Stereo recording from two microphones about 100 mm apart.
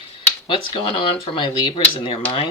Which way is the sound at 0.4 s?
55° left (ahead or behind).